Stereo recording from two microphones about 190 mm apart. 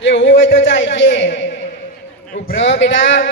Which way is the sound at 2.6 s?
70° left (ahead or behind).